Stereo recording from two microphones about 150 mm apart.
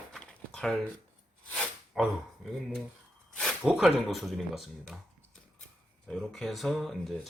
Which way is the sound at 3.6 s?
5° right (ahead or behind).